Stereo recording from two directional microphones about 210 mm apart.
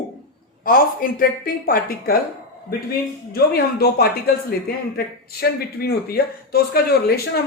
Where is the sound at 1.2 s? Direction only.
45° left (ahead or behind).